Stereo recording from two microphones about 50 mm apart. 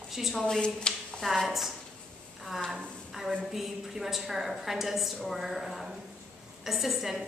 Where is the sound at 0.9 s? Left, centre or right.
Centre.